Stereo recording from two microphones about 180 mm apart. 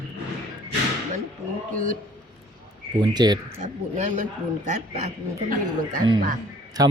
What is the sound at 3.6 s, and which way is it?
Speech, 40° right (ahead or behind).